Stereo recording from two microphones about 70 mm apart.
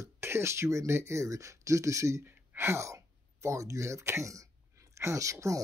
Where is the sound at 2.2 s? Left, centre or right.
Right.